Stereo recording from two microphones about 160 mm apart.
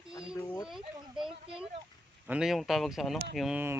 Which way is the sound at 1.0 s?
30° right (ahead or behind).